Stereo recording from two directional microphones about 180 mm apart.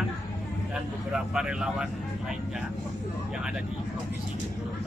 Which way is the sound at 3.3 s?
5° right (ahead or behind).